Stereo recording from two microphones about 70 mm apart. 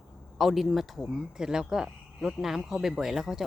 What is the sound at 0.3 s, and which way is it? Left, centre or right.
Speech, centre.